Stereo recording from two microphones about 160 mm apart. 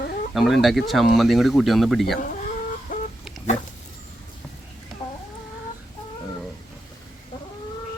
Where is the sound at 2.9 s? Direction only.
55° left (ahead or behind).